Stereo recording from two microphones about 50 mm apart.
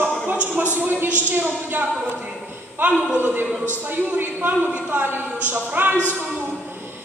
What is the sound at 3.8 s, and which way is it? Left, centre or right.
A woman's voice, right.